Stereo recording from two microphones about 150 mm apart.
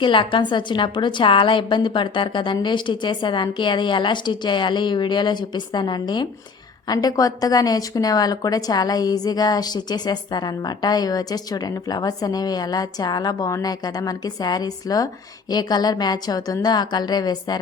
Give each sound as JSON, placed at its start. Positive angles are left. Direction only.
{"t": 0.0, "sound": "a woman's voice", "side_deg": 35}